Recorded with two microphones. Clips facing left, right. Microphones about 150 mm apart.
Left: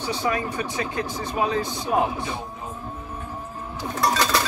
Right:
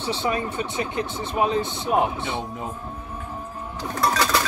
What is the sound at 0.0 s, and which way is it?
Speech, 25° right (ahead or behind).